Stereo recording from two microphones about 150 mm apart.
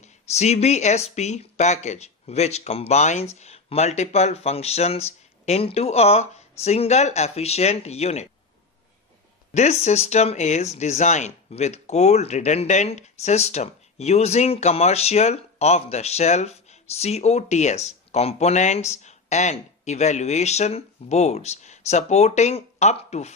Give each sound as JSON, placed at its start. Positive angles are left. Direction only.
{"t": 0.0, "sound": "speech", "side_deg": 45}
{"t": 9.6, "sound": "speech", "side_deg": 50}